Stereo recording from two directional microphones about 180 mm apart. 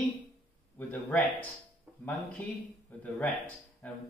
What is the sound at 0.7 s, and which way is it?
Speech, 10° left (ahead or behind).